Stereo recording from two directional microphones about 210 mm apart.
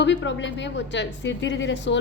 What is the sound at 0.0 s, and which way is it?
Speech, 55° left (ahead or behind).